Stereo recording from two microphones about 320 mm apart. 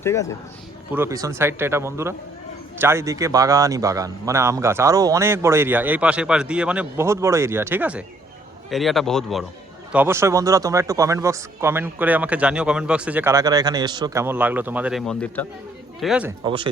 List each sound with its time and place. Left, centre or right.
0.0 s speech: centre
0.9 s speech: centre